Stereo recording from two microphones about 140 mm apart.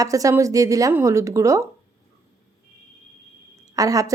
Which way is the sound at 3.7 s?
25° right (ahead or behind).